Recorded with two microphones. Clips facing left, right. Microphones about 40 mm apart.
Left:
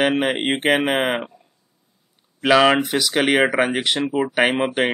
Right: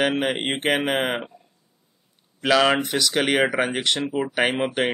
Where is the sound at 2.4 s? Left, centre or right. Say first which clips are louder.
Left 4 dB; centre.